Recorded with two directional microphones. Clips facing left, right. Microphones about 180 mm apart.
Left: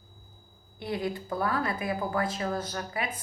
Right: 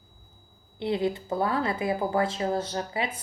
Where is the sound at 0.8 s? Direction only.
25° right (ahead or behind).